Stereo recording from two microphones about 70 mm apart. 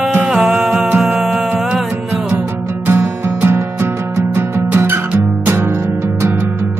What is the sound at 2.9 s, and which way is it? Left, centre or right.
Music, right.